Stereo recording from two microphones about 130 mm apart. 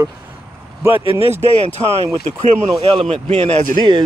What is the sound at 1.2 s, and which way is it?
Speech, 55° right (ahead or behind).